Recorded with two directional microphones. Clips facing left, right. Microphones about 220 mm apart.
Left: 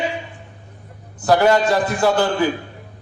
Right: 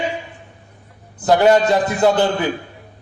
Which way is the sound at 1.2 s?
20° right (ahead or behind).